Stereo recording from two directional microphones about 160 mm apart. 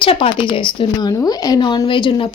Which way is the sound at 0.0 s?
35° left (ahead or behind).